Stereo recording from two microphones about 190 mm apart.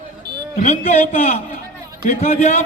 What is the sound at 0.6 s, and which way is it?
A man's voice, 35° left (ahead or behind).